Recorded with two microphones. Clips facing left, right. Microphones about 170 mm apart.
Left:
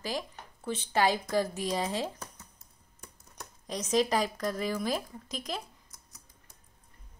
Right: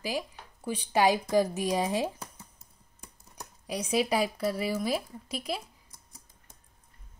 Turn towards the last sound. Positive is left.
turn(degrees=-30)  # may be behind; listen again after turning